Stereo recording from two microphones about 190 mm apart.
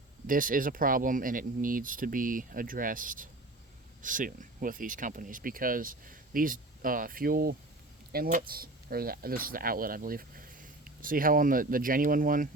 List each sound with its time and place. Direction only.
0.3 s speech: 45° right (ahead or behind)